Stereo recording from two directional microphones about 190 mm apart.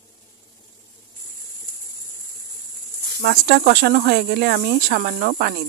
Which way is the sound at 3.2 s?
55° right (ahead or behind).